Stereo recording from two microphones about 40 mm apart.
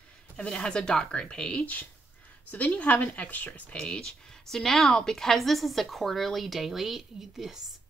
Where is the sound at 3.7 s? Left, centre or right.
Left.